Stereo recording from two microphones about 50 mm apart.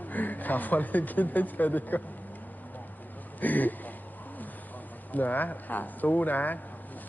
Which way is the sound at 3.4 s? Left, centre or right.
Left.